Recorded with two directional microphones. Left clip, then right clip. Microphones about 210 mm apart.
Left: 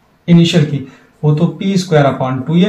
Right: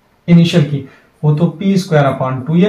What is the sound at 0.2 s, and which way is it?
Speech, 10° right (ahead or behind).